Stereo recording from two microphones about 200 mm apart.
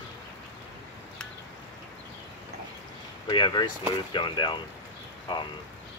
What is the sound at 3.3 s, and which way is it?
Speech, 20° left (ahead or behind).